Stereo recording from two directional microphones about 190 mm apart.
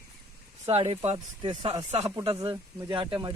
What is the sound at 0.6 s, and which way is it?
Speech, 30° right (ahead or behind).